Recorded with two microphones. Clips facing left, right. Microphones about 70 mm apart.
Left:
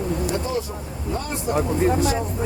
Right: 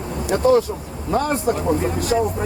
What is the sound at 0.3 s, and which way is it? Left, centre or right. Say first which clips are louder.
Speech: right 9 dB; right.